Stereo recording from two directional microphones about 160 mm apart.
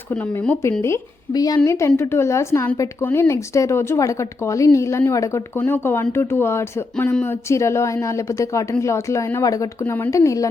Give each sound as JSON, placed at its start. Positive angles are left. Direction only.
{"t": 0.1, "sound": "a woman's voice", "side_deg": 10}